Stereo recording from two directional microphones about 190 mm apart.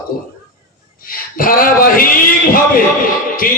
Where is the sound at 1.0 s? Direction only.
50° left (ahead or behind).